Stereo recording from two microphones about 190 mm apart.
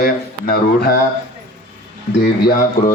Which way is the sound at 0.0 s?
50° left (ahead or behind).